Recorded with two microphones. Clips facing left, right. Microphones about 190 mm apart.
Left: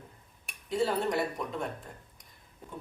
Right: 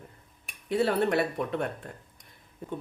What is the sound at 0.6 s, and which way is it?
Speech, 65° right (ahead or behind).